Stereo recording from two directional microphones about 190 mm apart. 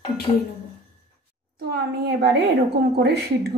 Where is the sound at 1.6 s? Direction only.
55° right (ahead or behind).